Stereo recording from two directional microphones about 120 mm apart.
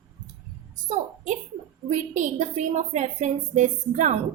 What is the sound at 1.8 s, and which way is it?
A woman's voice, 90° right.